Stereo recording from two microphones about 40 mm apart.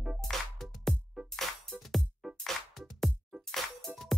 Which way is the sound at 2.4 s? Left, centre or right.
Centre.